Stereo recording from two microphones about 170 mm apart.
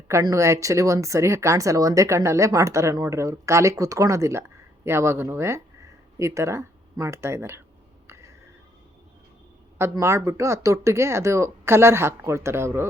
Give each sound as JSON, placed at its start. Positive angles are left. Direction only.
{"t": 0.1, "sound": "speech", "side_deg": -20}
{"t": 8.0, "sound": "a sound", "side_deg": -15}
{"t": 9.7, "sound": "speech", "side_deg": -15}